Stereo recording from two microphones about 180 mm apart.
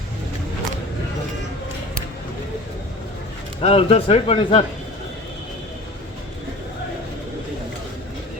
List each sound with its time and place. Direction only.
3.6 s speech: 35° left (ahead or behind)